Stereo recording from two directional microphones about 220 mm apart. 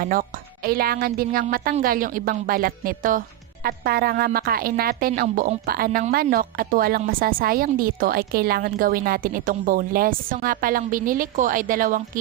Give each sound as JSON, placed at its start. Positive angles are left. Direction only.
{"t": 0.0, "sound": "a woman's voice", "side_deg": -40}